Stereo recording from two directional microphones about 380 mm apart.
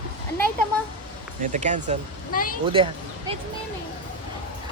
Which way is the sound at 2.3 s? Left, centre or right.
Left.